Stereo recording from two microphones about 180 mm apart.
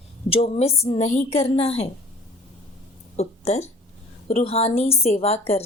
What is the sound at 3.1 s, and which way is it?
A woman's voice, 35° left (ahead or behind).